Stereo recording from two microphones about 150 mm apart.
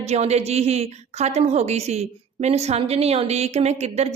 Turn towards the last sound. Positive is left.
turn(degrees=-45)  # may be behind; listen again after turning